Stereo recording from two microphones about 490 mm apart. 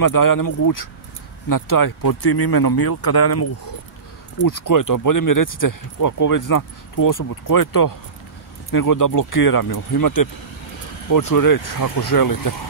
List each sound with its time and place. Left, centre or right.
0.0 s speech: left